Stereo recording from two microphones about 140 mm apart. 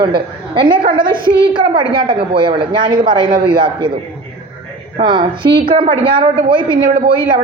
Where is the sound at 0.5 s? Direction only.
35° right (ahead or behind).